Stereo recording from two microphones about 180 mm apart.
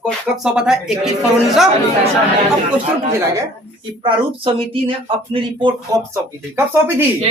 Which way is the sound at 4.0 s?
30° right (ahead or behind).